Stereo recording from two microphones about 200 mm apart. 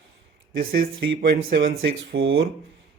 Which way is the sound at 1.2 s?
55° right (ahead or behind).